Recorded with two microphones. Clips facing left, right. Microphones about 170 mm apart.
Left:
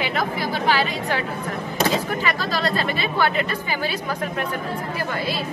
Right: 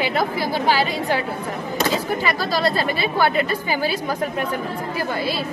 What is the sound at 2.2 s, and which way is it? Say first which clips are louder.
A woman's voice: right 3 dB; 35° right (ahead or behind).